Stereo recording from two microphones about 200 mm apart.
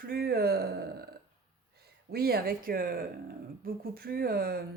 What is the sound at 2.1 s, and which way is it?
Speech, 50° right (ahead or behind).